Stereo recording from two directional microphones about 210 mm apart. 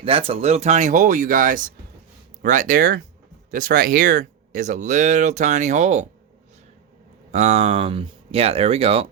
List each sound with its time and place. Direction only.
0.0 s speech: 25° right (ahead or behind)
7.3 s speech: 30° right (ahead or behind)